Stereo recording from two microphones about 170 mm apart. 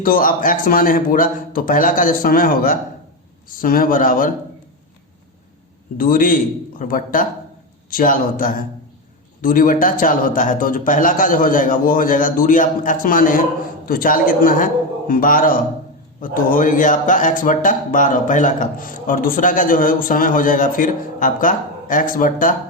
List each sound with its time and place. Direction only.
0.0 s a man's voice: 55° left (ahead or behind)
6.0 s a man's voice: 55° left (ahead or behind)